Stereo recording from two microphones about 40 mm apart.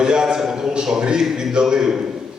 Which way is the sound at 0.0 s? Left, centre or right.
Right.